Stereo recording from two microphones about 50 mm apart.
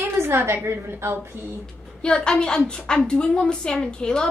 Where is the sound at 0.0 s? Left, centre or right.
Right.